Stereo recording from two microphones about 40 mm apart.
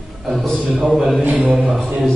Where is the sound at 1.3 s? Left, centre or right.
Right.